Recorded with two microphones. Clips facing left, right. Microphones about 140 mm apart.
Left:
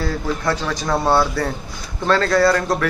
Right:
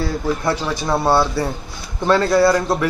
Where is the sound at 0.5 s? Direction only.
10° right (ahead or behind).